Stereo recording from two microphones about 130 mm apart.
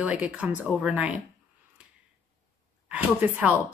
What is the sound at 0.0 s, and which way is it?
Speech, 10° right (ahead or behind).